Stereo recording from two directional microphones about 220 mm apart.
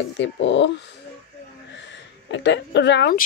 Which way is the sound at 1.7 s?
55° left (ahead or behind).